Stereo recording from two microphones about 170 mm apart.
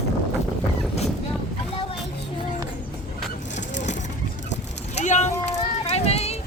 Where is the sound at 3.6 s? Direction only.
45° left (ahead or behind).